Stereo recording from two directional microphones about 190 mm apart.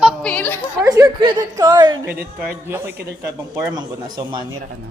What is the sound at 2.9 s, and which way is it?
Speech, 60° right (ahead or behind).